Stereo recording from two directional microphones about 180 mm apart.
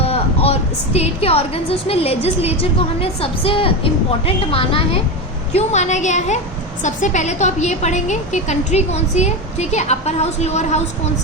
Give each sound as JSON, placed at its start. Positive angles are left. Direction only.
{"t": 0.0, "sound": "vehicle", "side_deg": 35}
{"t": 0.9, "sound": "a woman's voice", "side_deg": 35}